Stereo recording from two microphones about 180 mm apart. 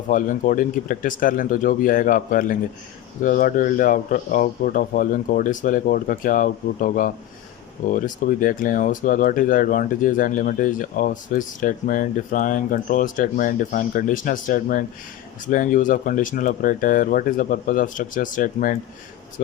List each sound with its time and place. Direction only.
0.1 s speech: 45° left (ahead or behind)